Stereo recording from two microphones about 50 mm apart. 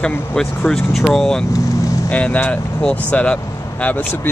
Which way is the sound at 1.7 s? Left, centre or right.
Left.